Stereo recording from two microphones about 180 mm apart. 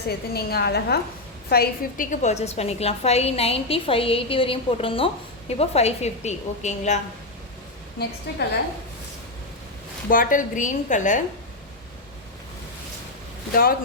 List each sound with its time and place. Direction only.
0.1 s a woman's voice: 60° left (ahead or behind); by 7.0 s 40° left (ahead or behind)
8.3 s a woman's voice: 65° left (ahead or behind)
10.1 s a woman's voice: 50° left (ahead or behind)
13.5 s a woman's voice: 55° left (ahead or behind)